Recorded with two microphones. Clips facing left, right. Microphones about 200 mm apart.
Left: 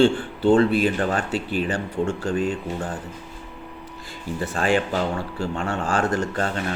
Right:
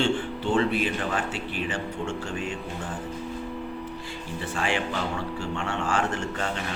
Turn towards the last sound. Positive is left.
turn(degrees=40)  # may be behind; listen again after turning